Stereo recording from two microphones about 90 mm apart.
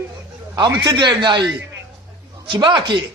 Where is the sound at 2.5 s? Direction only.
60° right (ahead or behind).